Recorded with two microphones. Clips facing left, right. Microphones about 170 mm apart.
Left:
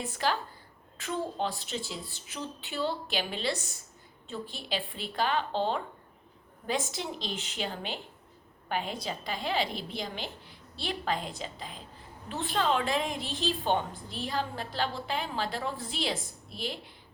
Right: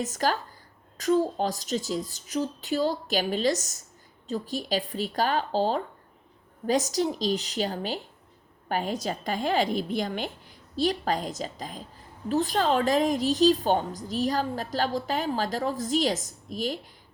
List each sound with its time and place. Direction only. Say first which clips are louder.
0.0 s a woman's voice: right 4 dB; 45° right (ahead or behind)